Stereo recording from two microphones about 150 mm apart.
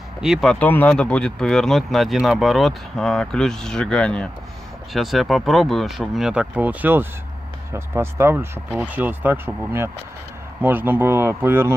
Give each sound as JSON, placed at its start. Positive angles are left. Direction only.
{"t": 0.2, "sound": "speech", "side_deg": 0}